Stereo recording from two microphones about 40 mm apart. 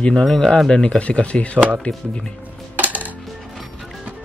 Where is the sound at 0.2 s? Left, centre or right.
Centre; by 2.0 s left.